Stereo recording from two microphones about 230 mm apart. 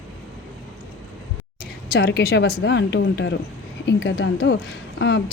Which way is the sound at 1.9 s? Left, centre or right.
Left.